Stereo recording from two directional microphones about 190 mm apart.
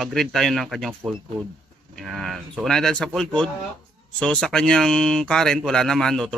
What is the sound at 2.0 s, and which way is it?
Speech, centre (ahead or behind).